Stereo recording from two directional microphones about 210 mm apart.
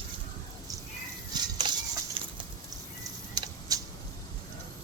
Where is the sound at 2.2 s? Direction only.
25° right (ahead or behind).